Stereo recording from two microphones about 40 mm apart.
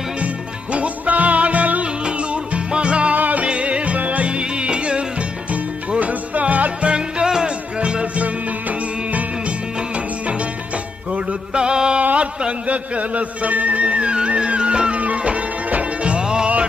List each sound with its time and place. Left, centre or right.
0.2 s music: right
3.2 s music: right
3.4 s music: right
4.3 s music: right
6.9 s music: right
12.0 s a sound: right
12.4 s music: right